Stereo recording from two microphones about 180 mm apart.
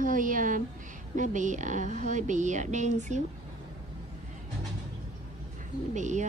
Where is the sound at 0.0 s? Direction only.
45° right (ahead or behind).